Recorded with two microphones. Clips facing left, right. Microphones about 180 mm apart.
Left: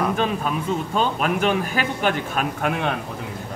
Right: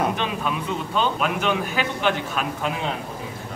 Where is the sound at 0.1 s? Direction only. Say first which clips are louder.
Left 3 dB; 40° left (ahead or behind); by 3.0 s 60° left (ahead or behind).